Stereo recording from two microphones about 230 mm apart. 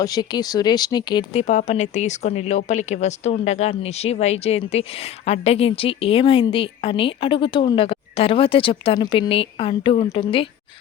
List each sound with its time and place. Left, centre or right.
0.0 s speech: centre